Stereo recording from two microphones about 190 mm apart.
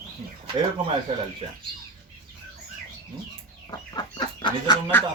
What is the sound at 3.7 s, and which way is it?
Chicken, 20° left (ahead or behind).